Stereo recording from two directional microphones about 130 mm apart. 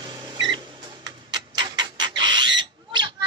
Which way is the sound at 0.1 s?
35° right (ahead or behind).